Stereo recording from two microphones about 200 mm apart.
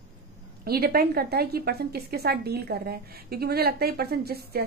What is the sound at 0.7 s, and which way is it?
A woman's voice, 50° right (ahead or behind).